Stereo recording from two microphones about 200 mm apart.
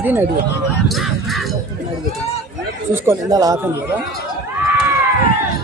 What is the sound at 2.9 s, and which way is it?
Speech, 10° right (ahead or behind).